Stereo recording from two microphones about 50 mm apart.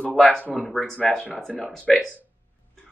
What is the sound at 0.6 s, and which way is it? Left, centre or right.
Speech, centre.